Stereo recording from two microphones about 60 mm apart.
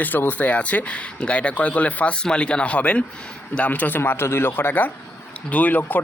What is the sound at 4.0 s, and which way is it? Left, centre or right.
Speech, left.